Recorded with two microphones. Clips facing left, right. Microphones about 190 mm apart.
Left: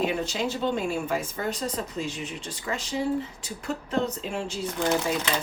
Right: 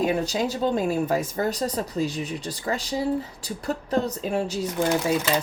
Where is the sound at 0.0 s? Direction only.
40° right (ahead or behind).